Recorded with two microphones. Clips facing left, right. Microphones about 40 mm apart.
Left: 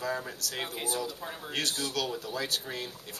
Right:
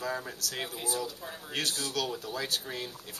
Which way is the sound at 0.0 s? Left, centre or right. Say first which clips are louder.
Left 1 dB; centre.